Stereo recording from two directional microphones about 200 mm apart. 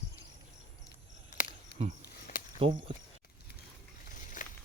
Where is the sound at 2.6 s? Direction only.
25° right (ahead or behind).